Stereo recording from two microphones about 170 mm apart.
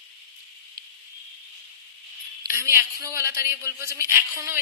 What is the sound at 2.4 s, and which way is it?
A woman's voice, 15° right (ahead or behind).